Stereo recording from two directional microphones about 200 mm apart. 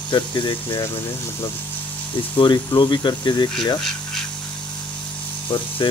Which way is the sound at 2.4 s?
25° left (ahead or behind).